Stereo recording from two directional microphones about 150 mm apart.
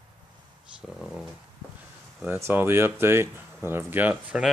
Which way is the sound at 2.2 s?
10° right (ahead or behind).